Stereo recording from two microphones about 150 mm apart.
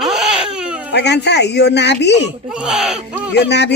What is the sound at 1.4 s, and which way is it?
Speech, 90° left.